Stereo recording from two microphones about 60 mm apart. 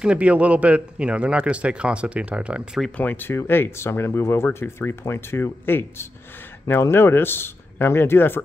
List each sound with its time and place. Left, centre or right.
0.0 s speech: centre
3.0 s speech: left